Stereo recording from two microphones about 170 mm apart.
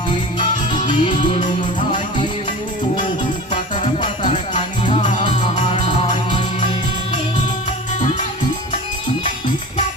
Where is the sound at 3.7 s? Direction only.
30° left (ahead or behind).